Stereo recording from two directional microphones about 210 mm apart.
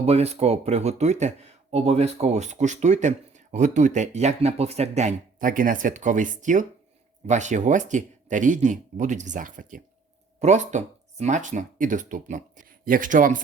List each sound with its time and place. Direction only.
0.0 s speech: 30° right (ahead or behind)